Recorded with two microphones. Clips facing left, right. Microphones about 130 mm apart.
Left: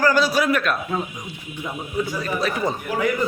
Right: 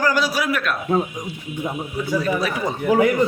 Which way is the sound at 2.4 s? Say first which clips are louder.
Even; 10° right (ahead or behind).